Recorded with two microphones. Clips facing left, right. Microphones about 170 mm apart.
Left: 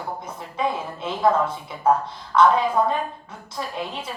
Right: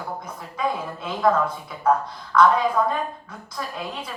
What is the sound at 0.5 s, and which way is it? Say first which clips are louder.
A woman's voice: left 1 dB; 25° left (ahead or behind).